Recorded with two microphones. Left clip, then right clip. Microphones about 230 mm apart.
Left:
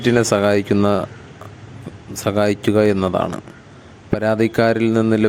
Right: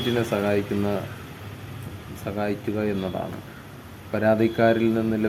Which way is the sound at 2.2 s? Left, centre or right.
Left.